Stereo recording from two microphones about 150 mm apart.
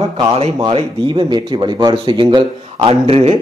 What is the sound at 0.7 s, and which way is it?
A man's voice, 35° right (ahead or behind).